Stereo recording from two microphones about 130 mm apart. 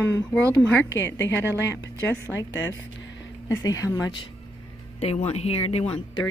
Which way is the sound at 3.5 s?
25° left (ahead or behind).